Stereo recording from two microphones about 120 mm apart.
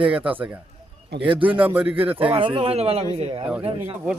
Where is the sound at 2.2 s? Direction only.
50° right (ahead or behind).